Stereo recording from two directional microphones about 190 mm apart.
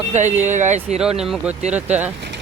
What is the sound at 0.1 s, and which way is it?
Speech, 40° right (ahead or behind).